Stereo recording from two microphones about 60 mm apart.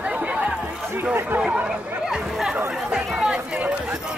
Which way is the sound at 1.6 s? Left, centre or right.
Centre.